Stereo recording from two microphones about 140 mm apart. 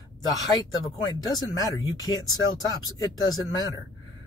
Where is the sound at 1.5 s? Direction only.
25° left (ahead or behind).